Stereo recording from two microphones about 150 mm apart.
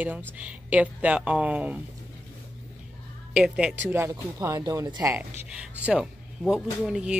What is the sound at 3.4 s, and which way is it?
Speech, 5° right (ahead or behind).